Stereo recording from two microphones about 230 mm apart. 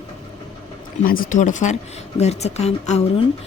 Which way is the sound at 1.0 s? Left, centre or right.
Left.